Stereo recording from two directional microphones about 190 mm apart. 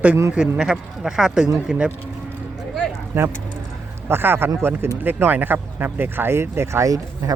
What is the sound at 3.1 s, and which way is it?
Speech, 10° right (ahead or behind).